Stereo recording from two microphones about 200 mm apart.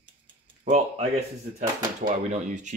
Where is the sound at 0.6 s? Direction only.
35° right (ahead or behind).